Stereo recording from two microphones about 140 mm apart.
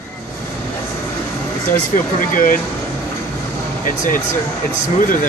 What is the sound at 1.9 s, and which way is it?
Speech, 75° left (ahead or behind).